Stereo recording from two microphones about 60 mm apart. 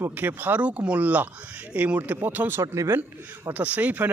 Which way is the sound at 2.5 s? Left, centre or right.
Right.